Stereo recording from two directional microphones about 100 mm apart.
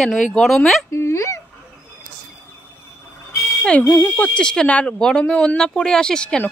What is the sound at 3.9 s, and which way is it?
Speech, 30° left (ahead or behind).